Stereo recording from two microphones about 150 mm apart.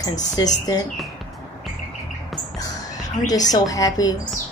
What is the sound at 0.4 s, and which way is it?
Speech, 25° left (ahead or behind).